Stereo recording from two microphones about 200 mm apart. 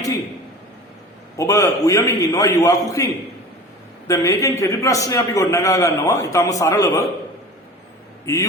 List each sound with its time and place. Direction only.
1.4 s a man's voice: 15° left (ahead or behind)
8.2 s a man's voice: 15° left (ahead or behind)